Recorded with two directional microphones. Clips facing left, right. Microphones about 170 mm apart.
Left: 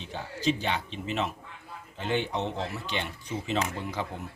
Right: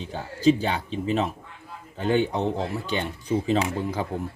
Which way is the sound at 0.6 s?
40° right (ahead or behind).